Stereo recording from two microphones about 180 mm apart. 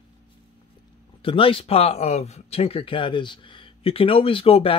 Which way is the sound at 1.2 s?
30° left (ahead or behind).